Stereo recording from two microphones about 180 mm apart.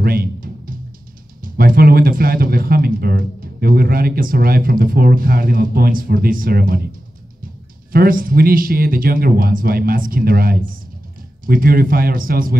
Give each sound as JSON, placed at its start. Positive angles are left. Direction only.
{"t": 0.0, "sound": "music", "side_deg": -55}
{"t": 1.4, "sound": "speech", "side_deg": -55}
{"t": 7.9, "sound": "speech", "side_deg": -55}